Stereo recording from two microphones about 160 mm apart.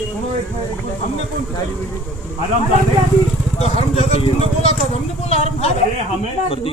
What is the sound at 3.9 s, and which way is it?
Vehicle, 40° left (ahead or behind).